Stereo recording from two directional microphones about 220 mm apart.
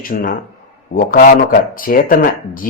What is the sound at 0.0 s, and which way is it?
Speech, 40° left (ahead or behind).